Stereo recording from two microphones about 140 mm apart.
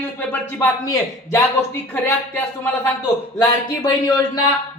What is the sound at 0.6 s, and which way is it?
Speech, 25° left (ahead or behind).